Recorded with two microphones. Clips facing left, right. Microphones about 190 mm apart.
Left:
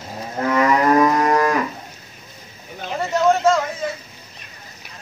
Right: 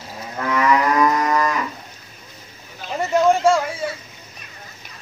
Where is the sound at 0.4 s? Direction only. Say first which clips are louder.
Left 1 dB; 40° left (ahead or behind).